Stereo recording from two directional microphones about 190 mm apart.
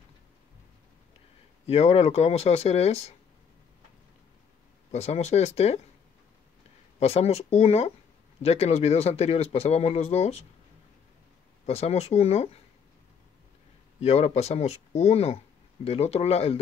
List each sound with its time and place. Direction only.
1.7 s speech: 35° left (ahead or behind)
4.9 s speech: 35° left (ahead or behind)
7.0 s speech: 35° left (ahead or behind)
11.6 s speech: 35° left (ahead or behind)
13.9 s speech: 35° left (ahead or behind)